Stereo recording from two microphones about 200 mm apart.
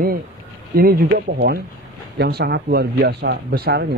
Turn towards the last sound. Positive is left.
turn(degrees=-55)  # may be behind; listen again after turning